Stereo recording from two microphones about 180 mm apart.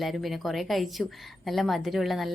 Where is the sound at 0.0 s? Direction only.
Centre (ahead or behind).